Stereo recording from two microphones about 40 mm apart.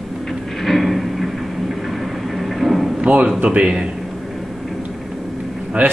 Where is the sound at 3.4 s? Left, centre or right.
Right.